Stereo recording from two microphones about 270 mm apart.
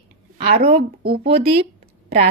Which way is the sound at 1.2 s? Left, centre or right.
Right.